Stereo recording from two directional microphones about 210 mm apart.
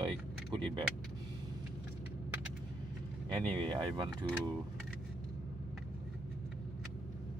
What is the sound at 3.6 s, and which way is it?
Speech, 20° right (ahead or behind).